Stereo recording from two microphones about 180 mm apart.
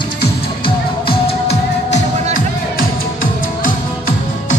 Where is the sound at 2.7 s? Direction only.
50° left (ahead or behind).